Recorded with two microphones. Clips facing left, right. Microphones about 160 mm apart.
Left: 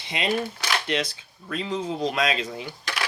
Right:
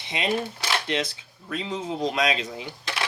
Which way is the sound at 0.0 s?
25° right (ahead or behind).